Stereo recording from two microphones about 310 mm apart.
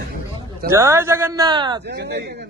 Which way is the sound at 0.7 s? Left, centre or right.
Centre.